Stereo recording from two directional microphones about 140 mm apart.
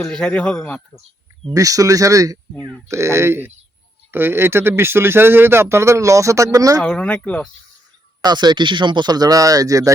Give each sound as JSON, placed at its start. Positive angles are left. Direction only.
{"t": 0.0, "sound": "speech", "side_deg": 5}
{"t": 1.5, "sound": "speech", "side_deg": -25}
{"t": 6.8, "sound": "speech", "side_deg": 10}
{"t": 8.2, "sound": "speech", "side_deg": -30}